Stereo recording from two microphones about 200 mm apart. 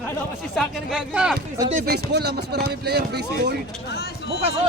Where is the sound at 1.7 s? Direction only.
45° right (ahead or behind).